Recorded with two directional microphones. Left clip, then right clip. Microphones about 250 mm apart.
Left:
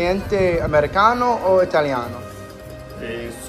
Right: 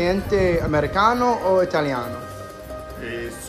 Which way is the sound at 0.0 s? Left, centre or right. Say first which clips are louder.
Left 1 dB; centre.